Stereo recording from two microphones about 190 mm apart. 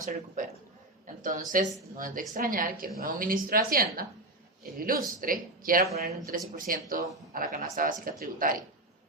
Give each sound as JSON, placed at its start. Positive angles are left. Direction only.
{"t": 0.4, "sound": "a woman's voice", "side_deg": -40}